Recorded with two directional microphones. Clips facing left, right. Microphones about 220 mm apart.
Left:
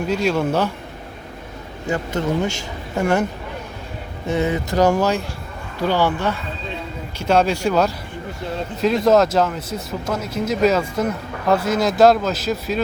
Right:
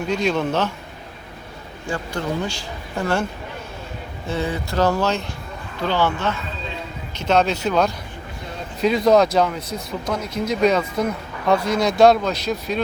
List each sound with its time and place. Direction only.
0.1 s speech: 5° left (ahead or behind)
1.9 s a man's voice: 20° left (ahead or behind)
4.3 s speech: 20° left (ahead or behind); by 12.8 s 5° left (ahead or behind)